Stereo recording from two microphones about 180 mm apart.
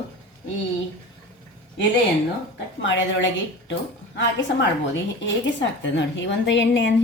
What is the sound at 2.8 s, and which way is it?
A woman's voice, 90° left.